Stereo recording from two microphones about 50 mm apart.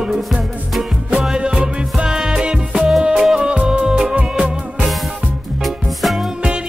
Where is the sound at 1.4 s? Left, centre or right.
Centre.